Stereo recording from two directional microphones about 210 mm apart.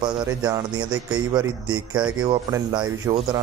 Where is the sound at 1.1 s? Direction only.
20° right (ahead or behind).